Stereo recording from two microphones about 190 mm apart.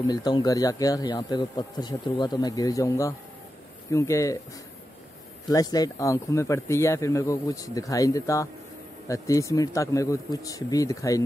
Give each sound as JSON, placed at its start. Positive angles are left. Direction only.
{"t": 0.1, "sound": "a man's voice", "side_deg": 20}
{"t": 5.5, "sound": "speech", "side_deg": 20}